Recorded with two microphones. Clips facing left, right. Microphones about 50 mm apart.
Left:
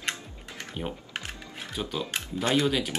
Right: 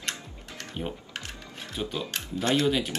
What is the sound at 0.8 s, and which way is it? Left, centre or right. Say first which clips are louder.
Speech: even; centre.